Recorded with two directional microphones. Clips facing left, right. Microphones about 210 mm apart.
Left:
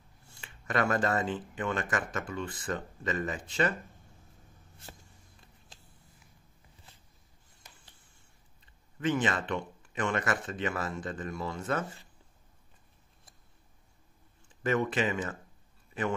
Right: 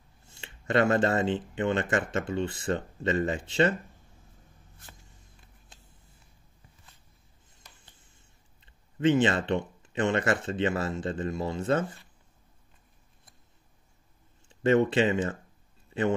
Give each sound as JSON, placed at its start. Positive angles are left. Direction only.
{"t": 0.3, "sound": "speech", "side_deg": -25}
{"t": 9.0, "sound": "speech", "side_deg": -25}
{"t": 14.5, "sound": "speech", "side_deg": -25}